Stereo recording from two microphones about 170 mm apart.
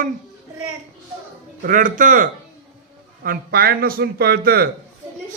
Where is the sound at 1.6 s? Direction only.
50° right (ahead or behind).